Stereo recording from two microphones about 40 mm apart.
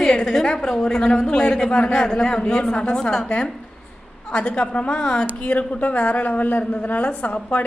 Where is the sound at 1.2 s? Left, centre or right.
Left.